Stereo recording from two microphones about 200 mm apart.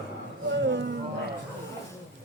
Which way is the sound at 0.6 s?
60° right (ahead or behind).